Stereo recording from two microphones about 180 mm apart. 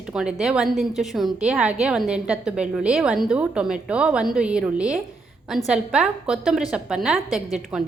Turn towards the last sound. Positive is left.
turn(degrees=0)  # may be behind; listen again after turning